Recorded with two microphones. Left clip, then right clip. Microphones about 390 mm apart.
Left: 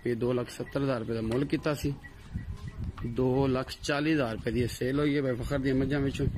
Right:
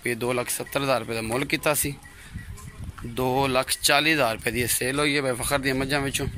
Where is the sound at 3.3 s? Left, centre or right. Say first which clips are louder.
Right 6 dB; centre.